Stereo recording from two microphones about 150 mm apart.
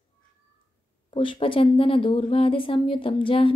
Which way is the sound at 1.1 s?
35° left (ahead or behind).